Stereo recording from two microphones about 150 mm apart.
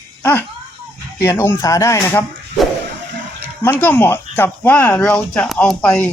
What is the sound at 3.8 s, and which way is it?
Speech, 10° left (ahead or behind).